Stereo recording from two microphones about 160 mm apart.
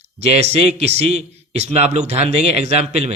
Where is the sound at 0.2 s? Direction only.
40° right (ahead or behind).